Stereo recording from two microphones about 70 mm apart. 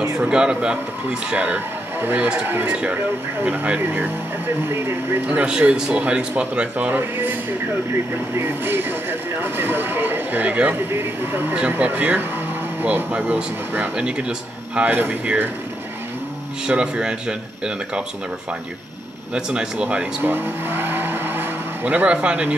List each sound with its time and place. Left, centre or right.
0.0 s speech: centre; by 2.7 s right
2.7 s speech: centre; by 5.2 s right
5.2 s speech: centre
7.0 s speech: right
8.4 s speech: right; by 14.2 s centre
14.8 s speech: right
16.6 s speech: centre
19.3 s speech: centre
20.2 s speech: right